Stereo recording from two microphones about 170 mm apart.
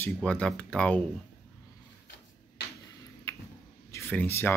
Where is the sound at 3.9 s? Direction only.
15° left (ahead or behind).